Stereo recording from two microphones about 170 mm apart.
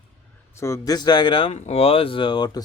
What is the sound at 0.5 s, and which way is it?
Speech, 15° left (ahead or behind).